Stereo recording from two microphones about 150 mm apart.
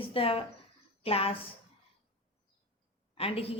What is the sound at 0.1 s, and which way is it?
A woman's voice, 40° left (ahead or behind).